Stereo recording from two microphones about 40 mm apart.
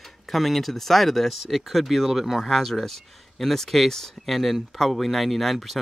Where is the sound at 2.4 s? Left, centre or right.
Centre.